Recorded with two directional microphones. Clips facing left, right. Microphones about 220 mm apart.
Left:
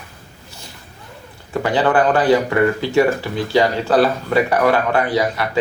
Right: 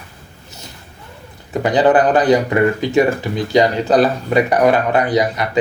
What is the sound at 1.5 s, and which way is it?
Speech, 20° right (ahead or behind).